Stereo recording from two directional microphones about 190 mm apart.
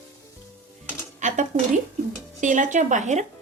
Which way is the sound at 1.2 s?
40° right (ahead or behind).